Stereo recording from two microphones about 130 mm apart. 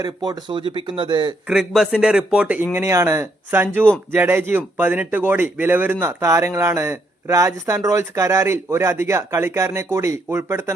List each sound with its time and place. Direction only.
0.0 s speech: 30° right (ahead or behind)
1.5 s a man's voice: 5° right (ahead or behind)
2.7 s speech: 20° right (ahead or behind)